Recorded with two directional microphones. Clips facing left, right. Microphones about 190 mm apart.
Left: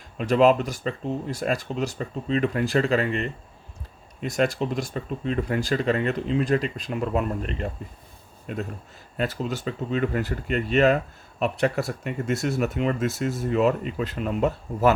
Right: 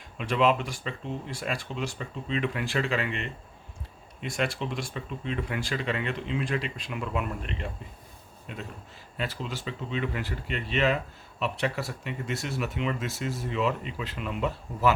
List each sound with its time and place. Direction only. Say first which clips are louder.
0.2 s speech: left 6 dB; 40° left (ahead or behind)